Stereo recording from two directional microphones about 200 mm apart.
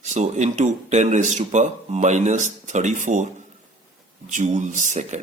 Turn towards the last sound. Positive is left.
turn(degrees=-35)  # may be behind; listen again after turning